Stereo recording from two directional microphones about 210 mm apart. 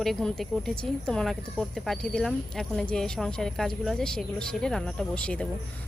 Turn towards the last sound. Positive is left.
turn(degrees=5)  # may be behind; listen again after turning